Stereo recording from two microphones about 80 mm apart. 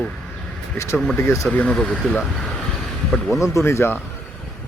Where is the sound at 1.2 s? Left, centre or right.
Left.